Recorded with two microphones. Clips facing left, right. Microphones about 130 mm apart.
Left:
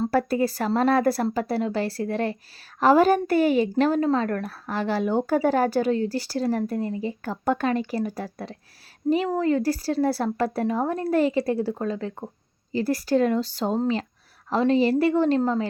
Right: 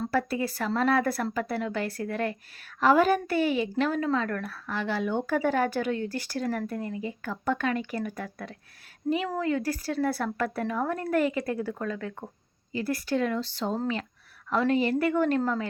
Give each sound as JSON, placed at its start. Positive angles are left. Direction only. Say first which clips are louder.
{"t": 0.0, "sound": "a woman's voice", "louder": "left 6 dB", "side_deg": 40}